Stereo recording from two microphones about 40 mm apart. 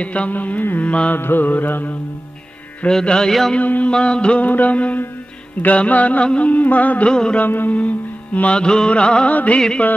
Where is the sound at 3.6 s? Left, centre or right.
Left.